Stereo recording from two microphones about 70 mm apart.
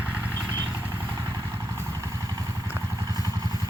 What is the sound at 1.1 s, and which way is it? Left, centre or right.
Vehicle, right.